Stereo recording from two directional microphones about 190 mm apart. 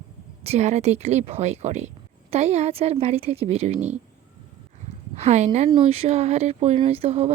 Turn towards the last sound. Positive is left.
turn(degrees=-35)  # may be behind; listen again after turning